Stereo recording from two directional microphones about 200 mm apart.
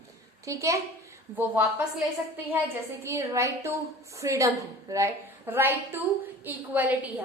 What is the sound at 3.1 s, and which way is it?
A woman's voice, 15° right (ahead or behind).